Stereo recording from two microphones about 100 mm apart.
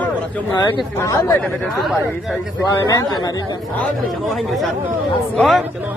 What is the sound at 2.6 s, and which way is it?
Speech, 35° left (ahead or behind).